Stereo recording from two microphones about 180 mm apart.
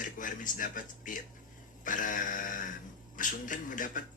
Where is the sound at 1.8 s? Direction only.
45° left (ahead or behind).